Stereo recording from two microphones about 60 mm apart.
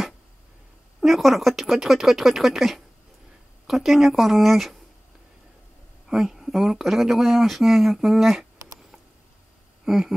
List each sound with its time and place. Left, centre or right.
1.0 s speech: centre
6.0 s speech: centre
9.8 s a sound: centre